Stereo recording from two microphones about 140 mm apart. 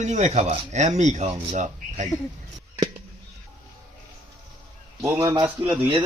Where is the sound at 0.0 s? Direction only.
55° right (ahead or behind).